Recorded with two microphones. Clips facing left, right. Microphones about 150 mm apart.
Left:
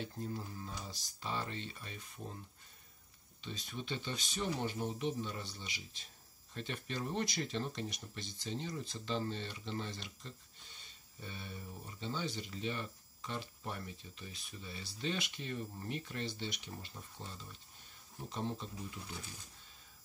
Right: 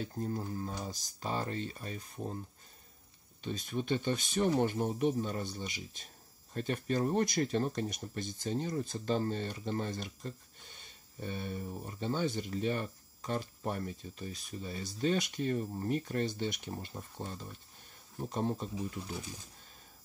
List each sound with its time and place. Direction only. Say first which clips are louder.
0.0 s speech: right 5 dB; 45° right (ahead or behind)
3.4 s speech: right 9 dB; 50° right (ahead or behind)